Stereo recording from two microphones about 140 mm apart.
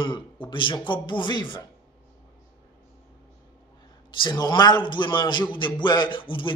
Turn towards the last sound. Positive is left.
turn(degrees=35)  # may be behind; listen again after turning